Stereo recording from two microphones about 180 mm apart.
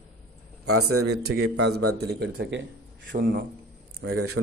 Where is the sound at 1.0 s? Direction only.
65° right (ahead or behind).